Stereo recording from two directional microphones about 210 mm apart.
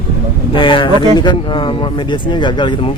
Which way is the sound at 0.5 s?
25° left (ahead or behind).